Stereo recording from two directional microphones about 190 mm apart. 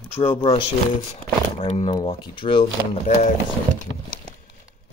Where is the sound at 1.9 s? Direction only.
25° left (ahead or behind).